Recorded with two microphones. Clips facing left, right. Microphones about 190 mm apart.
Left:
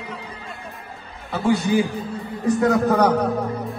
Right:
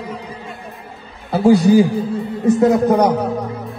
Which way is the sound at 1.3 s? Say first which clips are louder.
Right 8 dB; 35° right (ahead or behind).